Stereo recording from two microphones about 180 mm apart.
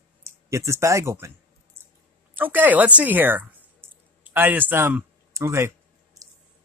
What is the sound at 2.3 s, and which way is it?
Speech, 10° right (ahead or behind).